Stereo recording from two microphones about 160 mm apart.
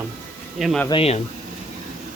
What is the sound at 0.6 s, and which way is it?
Speech, centre (ahead or behind).